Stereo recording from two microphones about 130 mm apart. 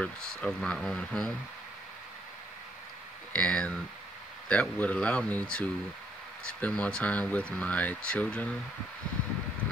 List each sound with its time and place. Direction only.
0.0 s speech: 5° left (ahead or behind)
3.3 s speech: 10° left (ahead or behind)